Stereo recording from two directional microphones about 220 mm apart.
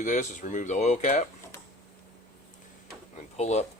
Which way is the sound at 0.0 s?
35° left (ahead or behind).